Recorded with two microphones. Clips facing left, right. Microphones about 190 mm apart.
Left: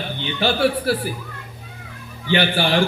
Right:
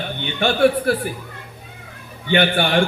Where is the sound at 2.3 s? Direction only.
55° right (ahead or behind).